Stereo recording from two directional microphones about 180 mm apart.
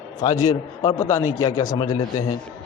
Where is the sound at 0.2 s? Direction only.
20° left (ahead or behind).